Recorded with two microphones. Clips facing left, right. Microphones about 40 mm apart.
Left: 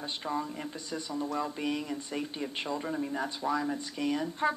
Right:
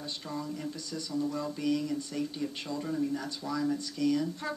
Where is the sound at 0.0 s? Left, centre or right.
Left.